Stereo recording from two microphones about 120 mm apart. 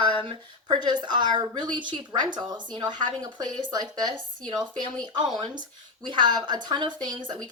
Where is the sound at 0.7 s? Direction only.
35° right (ahead or behind).